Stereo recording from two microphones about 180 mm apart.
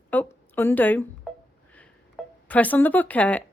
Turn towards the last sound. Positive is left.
turn(degrees=10)  # may be behind; listen again after turning